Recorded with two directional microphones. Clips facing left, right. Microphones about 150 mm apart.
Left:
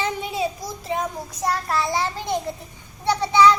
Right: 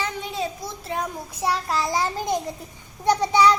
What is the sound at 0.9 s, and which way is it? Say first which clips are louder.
Child singing: left 3 dB; centre (ahead or behind).